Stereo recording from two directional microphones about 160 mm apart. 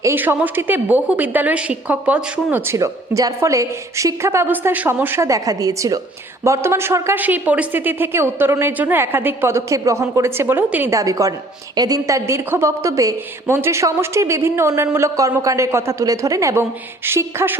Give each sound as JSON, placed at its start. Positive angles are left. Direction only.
{"t": 0.0, "sound": "speech", "side_deg": -15}